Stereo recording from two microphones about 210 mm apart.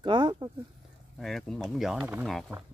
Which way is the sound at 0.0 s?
20° right (ahead or behind).